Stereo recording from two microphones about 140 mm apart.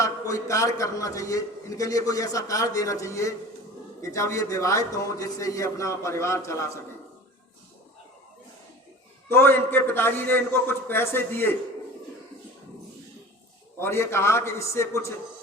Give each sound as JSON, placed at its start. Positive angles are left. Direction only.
{"t": 0.0, "sound": "a man's voice", "side_deg": 25}
{"t": 9.3, "sound": "a man's voice", "side_deg": 15}
{"t": 13.7, "sound": "a man's voice", "side_deg": 20}